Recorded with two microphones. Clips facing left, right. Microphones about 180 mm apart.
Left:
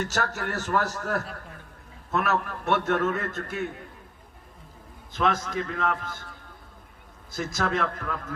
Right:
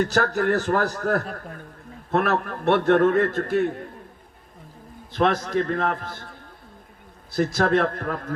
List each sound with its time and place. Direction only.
0.0 s a man's voice: 40° right (ahead or behind)
1.2 s a man's voice: 50° right (ahead or behind)
5.2 s a man's voice: 50° right (ahead or behind)
7.5 s a man's voice: 50° right (ahead or behind)